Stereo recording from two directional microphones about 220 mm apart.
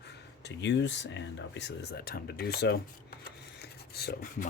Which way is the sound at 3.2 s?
45° left (ahead or behind).